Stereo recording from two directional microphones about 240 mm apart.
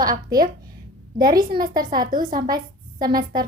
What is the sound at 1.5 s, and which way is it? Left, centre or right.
Speech, right.